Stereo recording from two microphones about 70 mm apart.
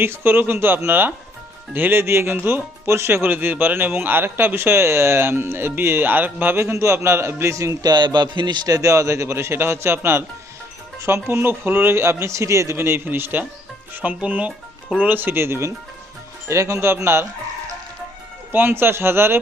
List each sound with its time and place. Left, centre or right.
0.0 s a man's voice: right
2.8 s a man's voice: right
6.6 s a man's voice: right
7.5 s a man's voice: right
7.8 s a man's voice: right
12.7 s a man's voice: right
18.5 s a man's voice: right